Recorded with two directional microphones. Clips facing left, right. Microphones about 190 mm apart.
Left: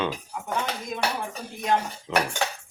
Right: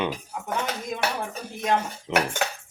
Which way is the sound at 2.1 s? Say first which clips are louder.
Right 1 dB; 20° right (ahead or behind).